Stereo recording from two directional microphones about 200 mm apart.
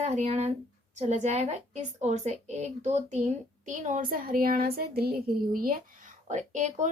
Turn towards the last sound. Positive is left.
turn(degrees=-35)  # may be behind; listen again after turning